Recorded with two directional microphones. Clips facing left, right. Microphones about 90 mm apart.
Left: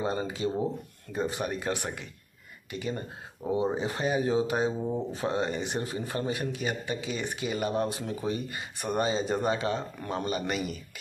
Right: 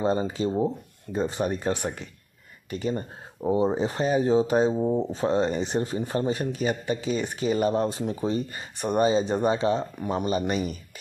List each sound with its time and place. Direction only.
0.0 s speech: 30° right (ahead or behind)
10.3 s speech: 30° right (ahead or behind)